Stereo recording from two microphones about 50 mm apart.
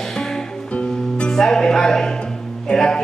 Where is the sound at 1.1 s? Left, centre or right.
Centre.